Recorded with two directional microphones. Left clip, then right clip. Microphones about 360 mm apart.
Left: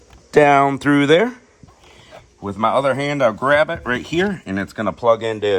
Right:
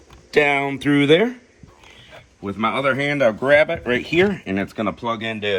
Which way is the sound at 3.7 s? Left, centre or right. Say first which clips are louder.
Right 1 dB; left.